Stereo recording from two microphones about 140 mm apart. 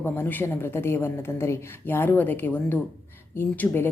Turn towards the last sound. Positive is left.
turn(degrees=15)  # may be behind; listen again after turning